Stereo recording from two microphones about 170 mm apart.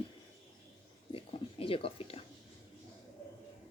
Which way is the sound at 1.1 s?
35° left (ahead or behind).